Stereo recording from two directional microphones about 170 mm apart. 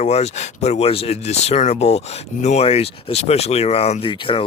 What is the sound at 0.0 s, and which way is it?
Speech, 40° left (ahead or behind).